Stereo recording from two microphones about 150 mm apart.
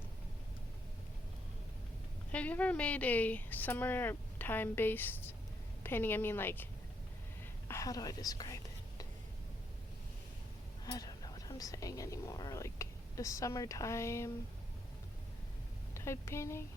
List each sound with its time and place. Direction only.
2.3 s speech: 10° left (ahead or behind)
7.7 s speech: 20° left (ahead or behind)
10.8 s speech: 25° left (ahead or behind)
16.0 s speech: 20° left (ahead or behind)